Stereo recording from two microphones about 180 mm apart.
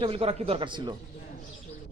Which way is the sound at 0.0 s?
30° right (ahead or behind).